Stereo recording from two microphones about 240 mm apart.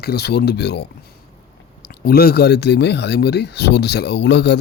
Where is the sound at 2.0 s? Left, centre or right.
Left.